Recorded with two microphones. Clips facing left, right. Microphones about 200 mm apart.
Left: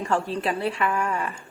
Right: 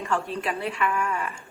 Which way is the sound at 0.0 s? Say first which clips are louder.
Left 3 dB; 30° left (ahead or behind).